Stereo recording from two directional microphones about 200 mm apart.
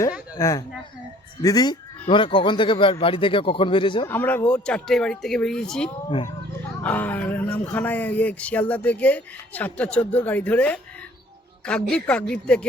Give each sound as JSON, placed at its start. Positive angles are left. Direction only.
{"t": 0.3, "sound": "speech", "side_deg": 15}
{"t": 4.1, "sound": "speech", "side_deg": 10}